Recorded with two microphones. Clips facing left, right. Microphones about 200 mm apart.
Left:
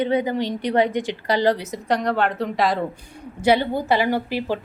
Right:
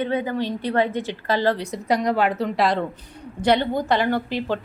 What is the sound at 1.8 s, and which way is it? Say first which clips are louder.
A woman's voice: right 1 dB; 10° right (ahead or behind).